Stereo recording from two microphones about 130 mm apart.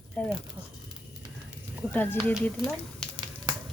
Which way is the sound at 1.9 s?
15° left (ahead or behind).